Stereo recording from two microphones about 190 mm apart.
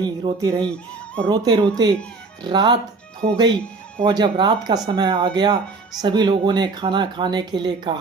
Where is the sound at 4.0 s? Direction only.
20° right (ahead or behind).